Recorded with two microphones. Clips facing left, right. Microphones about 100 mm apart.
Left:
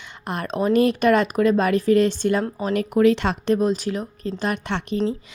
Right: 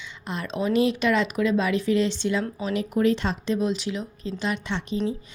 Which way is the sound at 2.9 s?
75° left (ahead or behind).